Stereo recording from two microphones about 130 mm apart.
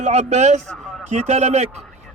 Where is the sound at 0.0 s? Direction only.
60° right (ahead or behind).